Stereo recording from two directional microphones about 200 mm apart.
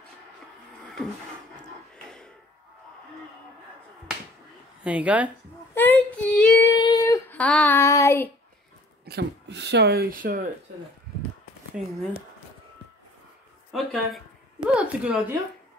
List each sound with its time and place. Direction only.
2.0 s a sound: 5° left (ahead or behind)
4.8 s speech: 5° right (ahead or behind)
5.8 s child singing: 10° left (ahead or behind)
6.7 s child singing: 20° left (ahead or behind)
9.0 s speech: 55° right (ahead or behind)
13.7 s speech: centre (ahead or behind)